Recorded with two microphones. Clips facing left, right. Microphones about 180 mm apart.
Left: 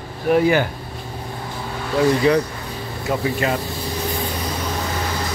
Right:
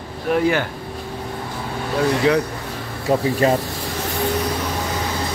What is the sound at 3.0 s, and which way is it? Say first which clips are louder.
Speech: right 4 dB; 35° right (ahead or behind).